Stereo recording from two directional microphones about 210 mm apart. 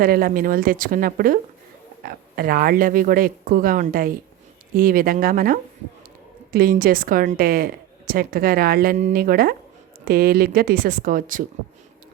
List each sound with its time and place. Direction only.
0.0 s a woman's voice: 45° right (ahead or behind)